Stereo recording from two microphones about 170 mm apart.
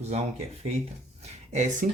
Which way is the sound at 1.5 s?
45° right (ahead or behind).